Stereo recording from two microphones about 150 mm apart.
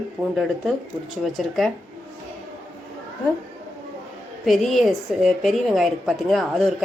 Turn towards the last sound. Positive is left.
turn(degrees=0)  # may be behind; listen again after turning